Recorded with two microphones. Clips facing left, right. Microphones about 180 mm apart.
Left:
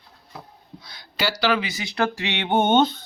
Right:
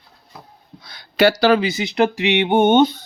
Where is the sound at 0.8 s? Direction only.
60° right (ahead or behind).